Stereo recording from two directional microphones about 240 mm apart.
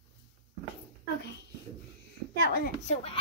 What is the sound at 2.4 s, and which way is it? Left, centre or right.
Speech, left.